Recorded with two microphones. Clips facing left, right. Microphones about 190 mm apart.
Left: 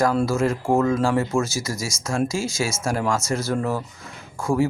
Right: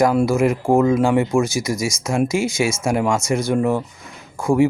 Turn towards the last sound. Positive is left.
turn(degrees=-15)  # may be behind; listen again after turning